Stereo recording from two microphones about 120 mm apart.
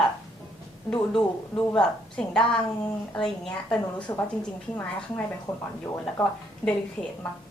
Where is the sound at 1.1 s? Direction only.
5° left (ahead or behind).